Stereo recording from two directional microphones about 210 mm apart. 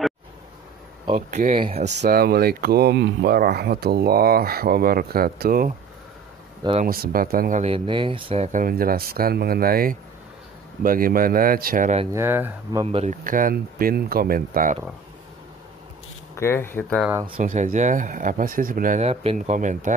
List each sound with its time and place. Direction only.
1.1 s speech: 35° right (ahead or behind)
2.0 s speech: 45° right (ahead or behind)
6.8 s speech: 45° right (ahead or behind)
12.1 s speech: 10° right (ahead or behind)
12.8 s speech: 30° right (ahead or behind)
16.3 s speech: 10° left (ahead or behind)
17.1 s speech: 20° right (ahead or behind)
17.4 s speech: 40° right (ahead or behind)